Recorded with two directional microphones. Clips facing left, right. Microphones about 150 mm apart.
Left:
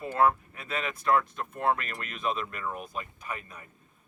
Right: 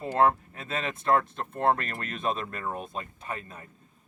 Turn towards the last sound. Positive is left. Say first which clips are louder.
# right 2 dB
turn(degrees=-35)  # may be behind; listen again after turning